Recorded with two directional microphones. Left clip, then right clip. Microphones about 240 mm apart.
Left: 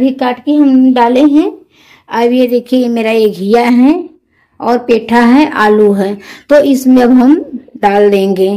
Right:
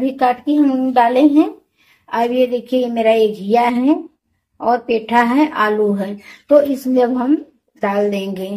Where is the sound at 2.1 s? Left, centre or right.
Left.